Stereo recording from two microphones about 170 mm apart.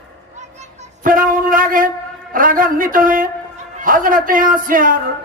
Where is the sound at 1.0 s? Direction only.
55° right (ahead or behind).